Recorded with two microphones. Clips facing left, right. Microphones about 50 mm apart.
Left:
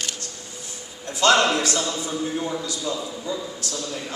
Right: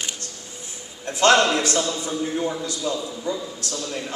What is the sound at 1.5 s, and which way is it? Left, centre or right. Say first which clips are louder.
Speech: right 1 dB; right.